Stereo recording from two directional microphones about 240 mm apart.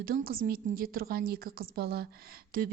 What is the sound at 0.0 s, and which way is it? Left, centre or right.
Speech, right.